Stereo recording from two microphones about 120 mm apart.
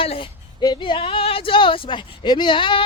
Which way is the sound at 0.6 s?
40° left (ahead or behind).